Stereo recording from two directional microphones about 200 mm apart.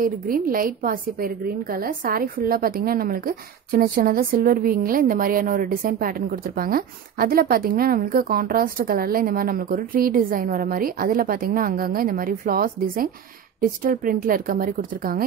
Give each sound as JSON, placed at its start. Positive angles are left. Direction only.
{"t": 0.0, "sound": "a woman's voice", "side_deg": -45}